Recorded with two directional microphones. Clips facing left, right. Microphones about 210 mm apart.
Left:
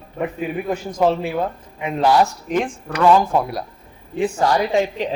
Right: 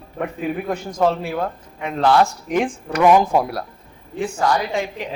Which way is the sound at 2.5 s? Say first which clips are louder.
Right 1 dB; 10° right (ahead or behind).